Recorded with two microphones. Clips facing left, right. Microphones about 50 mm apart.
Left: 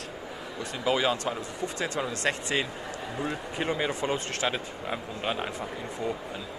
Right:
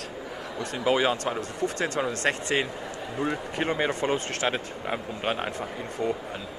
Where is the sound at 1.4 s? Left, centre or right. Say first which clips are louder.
Right 4 dB; right.